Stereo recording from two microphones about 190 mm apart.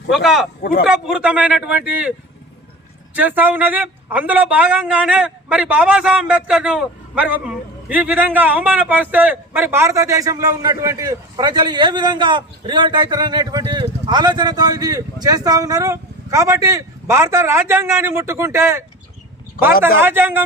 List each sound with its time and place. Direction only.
0.1 s speech: centre (ahead or behind)
0.6 s speech: 55° left (ahead or behind)
0.9 s speech: 5° right (ahead or behind)
3.2 s a man's voice: 10° right (ahead or behind)
20.0 s a man's voice: 10° right (ahead or behind)